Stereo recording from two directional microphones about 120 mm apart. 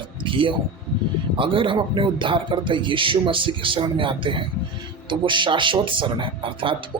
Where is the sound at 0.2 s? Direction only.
45° right (ahead or behind).